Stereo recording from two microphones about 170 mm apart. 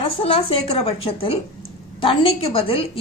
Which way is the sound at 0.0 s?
35° left (ahead or behind).